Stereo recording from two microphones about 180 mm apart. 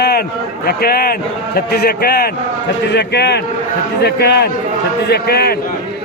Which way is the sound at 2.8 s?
70° left (ahead or behind).